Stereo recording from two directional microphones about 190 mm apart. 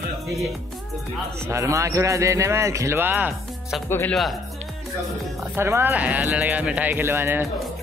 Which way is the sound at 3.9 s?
10° left (ahead or behind).